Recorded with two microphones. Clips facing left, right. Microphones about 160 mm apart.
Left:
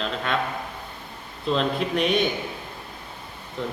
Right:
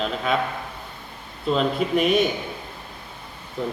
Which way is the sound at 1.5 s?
5° right (ahead or behind).